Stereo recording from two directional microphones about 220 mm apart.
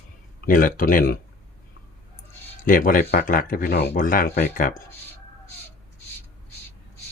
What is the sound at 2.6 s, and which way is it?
Speech, 40° left (ahead or behind).